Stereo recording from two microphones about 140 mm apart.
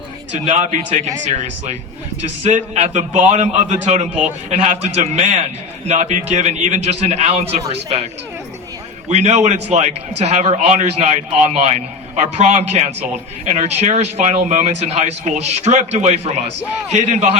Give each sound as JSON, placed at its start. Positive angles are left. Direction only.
{"t": 0.5, "sound": "a man's voice", "side_deg": -55}
{"t": 9.0, "sound": "a man's voice", "side_deg": -55}